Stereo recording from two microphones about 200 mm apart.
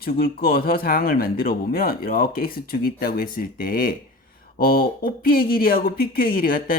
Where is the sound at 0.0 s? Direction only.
45° left (ahead or behind).